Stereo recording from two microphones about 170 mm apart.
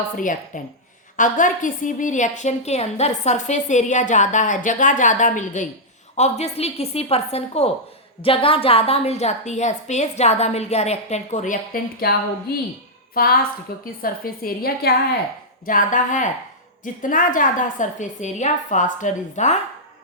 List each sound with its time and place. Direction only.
0.2 s a woman's voice: 50° left (ahead or behind)
13.2 s a woman's voice: 60° left (ahead or behind)
15.6 s a woman's voice: 50° left (ahead or behind)